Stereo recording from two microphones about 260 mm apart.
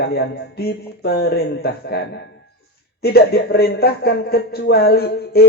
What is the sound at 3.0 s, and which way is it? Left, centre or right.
A man's voice, left.